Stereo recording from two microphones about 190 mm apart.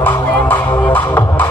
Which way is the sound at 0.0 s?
10° left (ahead or behind).